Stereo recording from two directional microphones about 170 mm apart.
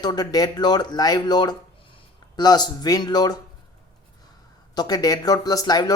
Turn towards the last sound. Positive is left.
turn(degrees=20)  # may be behind; listen again after turning